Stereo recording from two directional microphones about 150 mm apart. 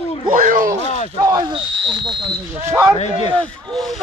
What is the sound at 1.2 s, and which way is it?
Speech, 30° right (ahead or behind).